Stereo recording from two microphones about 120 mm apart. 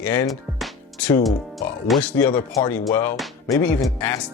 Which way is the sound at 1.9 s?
10° left (ahead or behind).